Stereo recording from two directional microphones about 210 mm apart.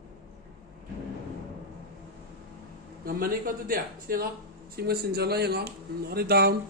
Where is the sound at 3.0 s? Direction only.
45° right (ahead or behind).